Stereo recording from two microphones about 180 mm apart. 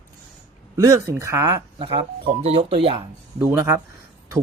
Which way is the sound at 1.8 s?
30° right (ahead or behind).